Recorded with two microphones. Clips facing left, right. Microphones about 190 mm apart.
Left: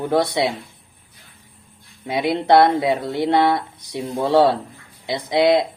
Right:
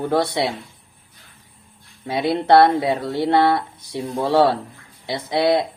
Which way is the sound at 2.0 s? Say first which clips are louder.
Even; 15° left (ahead or behind).